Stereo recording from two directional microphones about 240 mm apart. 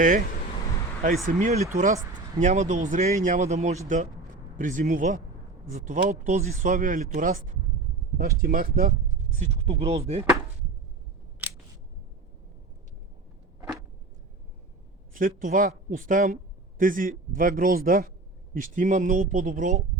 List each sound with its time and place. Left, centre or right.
1.3 s speech: right
9.4 s speech: right
13.6 s a sound: centre
15.1 s speech: right